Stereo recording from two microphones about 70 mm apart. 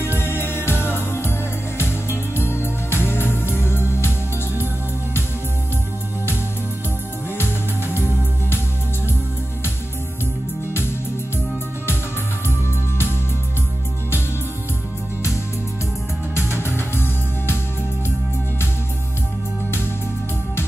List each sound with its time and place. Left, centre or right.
0.2 s music: left
7.3 s music: left
12.4 s music: left
16.3 s music: left